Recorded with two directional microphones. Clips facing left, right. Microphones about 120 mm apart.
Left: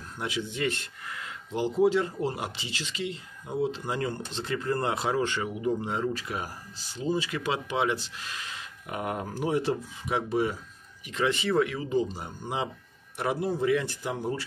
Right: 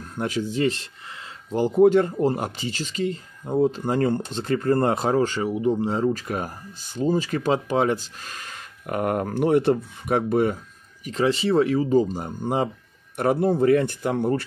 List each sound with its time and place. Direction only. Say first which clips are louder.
0.2 s speech: right 7 dB; 45° right (ahead or behind); by 1.3 s 30° right (ahead or behind)
1.5 s speech: right 7 dB; 50° right (ahead or behind)
11.1 s speech: right 6 dB; 35° right (ahead or behind); by 14.4 s 60° right (ahead or behind)